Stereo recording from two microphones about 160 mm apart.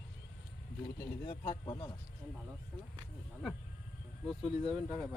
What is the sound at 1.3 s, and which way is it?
Speech, 30° left (ahead or behind).